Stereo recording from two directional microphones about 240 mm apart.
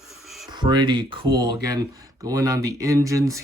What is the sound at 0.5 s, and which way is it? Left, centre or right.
Speech, centre.